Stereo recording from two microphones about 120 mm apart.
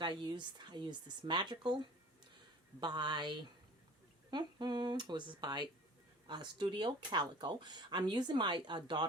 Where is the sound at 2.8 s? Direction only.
40° right (ahead or behind).